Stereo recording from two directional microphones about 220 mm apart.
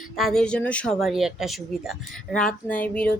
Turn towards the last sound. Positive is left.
turn(degrees=5)  # may be behind; listen again after turning